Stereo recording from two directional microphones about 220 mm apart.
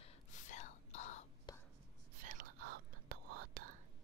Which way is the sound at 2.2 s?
40° right (ahead or behind).